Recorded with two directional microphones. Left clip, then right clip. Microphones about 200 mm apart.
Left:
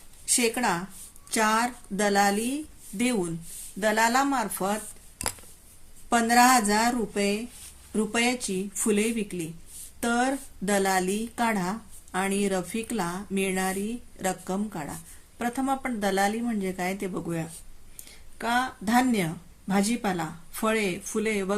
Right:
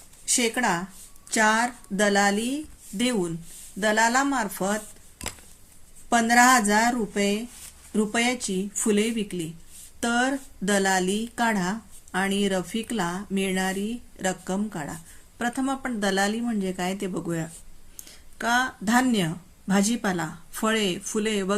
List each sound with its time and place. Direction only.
0.3 s speech: 20° right (ahead or behind)
3.8 s speech: 15° right (ahead or behind)
6.1 s speech: 20° right (ahead or behind)